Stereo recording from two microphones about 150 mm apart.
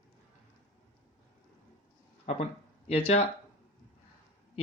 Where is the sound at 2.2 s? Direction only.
45° left (ahead or behind).